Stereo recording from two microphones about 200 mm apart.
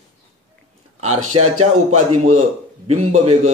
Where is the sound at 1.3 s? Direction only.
90° right.